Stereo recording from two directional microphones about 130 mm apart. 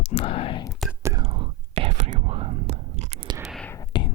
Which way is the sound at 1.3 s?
40° right (ahead or behind).